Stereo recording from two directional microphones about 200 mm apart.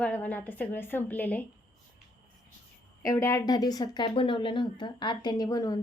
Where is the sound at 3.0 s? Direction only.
15° left (ahead or behind).